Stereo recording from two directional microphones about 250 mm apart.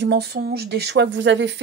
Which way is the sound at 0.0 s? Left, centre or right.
Right.